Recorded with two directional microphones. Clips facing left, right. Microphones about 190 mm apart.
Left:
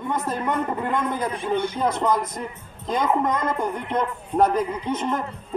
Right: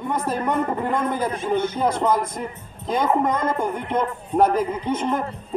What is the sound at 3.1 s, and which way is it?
Speech, 25° right (ahead or behind).